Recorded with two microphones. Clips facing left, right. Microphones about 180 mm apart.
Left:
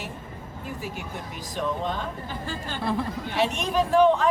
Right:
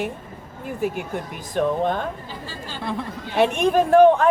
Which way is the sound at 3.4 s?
55° right (ahead or behind).